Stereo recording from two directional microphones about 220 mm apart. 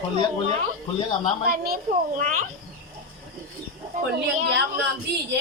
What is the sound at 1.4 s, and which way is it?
A child's voice, 40° right (ahead or behind).